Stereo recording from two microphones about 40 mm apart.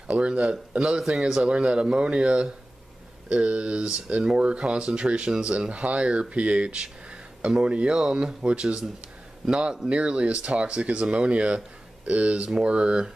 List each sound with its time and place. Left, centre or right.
0.2 s speech: right
8.4 s speech: right